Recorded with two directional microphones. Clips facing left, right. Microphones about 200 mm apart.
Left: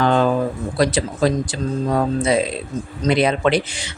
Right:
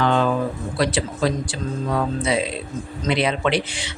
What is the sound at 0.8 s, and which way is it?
Speech, 40° left (ahead or behind).